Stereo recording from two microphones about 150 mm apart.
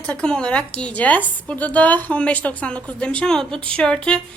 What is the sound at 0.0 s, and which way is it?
A woman's voice, 5° left (ahead or behind).